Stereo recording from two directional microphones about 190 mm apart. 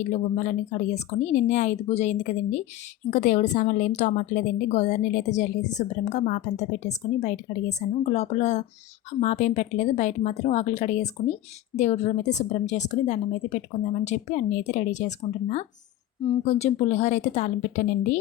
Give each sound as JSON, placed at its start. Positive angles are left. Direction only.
{"t": 0.0, "sound": "a woman's voice", "side_deg": 40}